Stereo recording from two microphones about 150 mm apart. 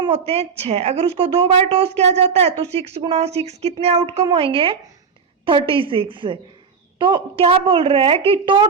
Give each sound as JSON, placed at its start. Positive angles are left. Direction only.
{"t": 0.0, "sound": "a woman's voice", "side_deg": -40}